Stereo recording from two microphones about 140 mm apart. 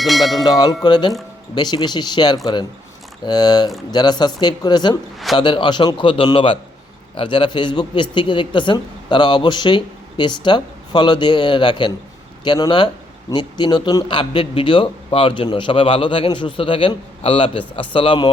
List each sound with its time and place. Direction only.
0.0 s cowbell: centre (ahead or behind)
0.4 s a man's voice: 30° left (ahead or behind)